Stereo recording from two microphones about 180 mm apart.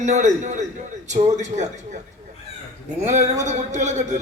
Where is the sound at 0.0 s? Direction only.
40° right (ahead or behind).